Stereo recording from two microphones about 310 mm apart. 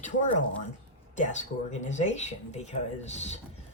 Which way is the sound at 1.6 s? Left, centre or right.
Left.